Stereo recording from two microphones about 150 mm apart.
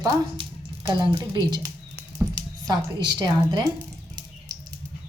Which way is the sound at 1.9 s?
25° right (ahead or behind).